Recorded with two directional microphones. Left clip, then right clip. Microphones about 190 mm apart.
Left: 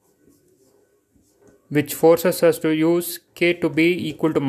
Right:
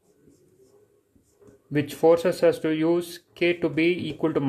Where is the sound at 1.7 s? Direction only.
20° left (ahead or behind).